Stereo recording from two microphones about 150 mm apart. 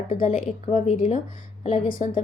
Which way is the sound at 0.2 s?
45° left (ahead or behind).